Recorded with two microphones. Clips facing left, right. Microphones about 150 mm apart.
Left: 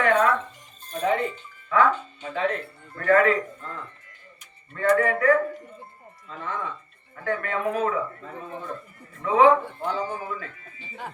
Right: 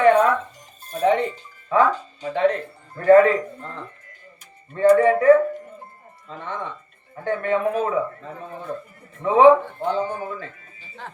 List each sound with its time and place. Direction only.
0.0 s music: 30° right (ahead or behind)
1.7 s speech: 35° right (ahead or behind)